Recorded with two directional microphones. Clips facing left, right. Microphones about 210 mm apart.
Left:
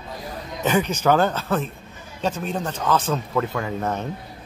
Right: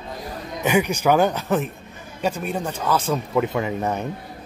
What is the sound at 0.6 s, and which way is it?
Speech, 15° right (ahead or behind).